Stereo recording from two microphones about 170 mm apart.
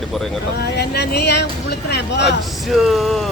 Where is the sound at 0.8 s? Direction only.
75° left (ahead or behind).